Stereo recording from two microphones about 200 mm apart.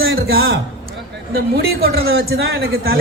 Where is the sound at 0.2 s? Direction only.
50° right (ahead or behind).